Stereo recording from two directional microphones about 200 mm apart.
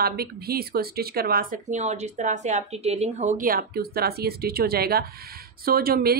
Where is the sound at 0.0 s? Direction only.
50° right (ahead or behind).